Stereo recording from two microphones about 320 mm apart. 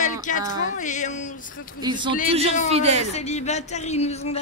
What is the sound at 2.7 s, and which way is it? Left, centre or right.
Speech, centre.